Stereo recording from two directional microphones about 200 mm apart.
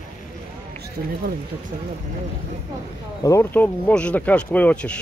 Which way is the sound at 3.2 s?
15° left (ahead or behind).